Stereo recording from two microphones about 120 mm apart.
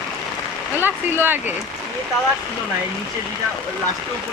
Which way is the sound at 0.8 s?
20° right (ahead or behind).